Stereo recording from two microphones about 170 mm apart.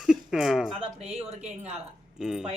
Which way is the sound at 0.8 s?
35° right (ahead or behind).